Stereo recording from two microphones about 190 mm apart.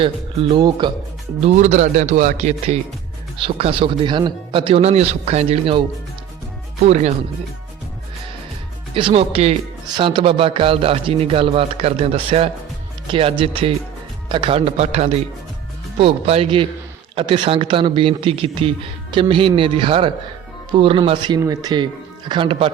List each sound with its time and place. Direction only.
0.5 s speech: 25° right (ahead or behind)
1.4 s speech: 35° right (ahead or behind)
6.8 s speech: 35° right (ahead or behind)
9.0 s speech: 30° right (ahead or behind)